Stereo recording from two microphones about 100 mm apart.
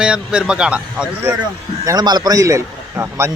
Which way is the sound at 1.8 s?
45° right (ahead or behind).